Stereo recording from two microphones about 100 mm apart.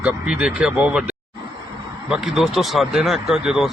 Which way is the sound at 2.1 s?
5° right (ahead or behind).